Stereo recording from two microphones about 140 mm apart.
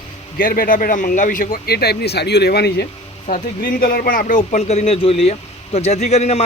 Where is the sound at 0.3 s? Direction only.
90° left.